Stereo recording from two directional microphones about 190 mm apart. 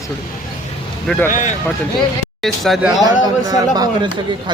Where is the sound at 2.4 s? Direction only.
Centre (ahead or behind).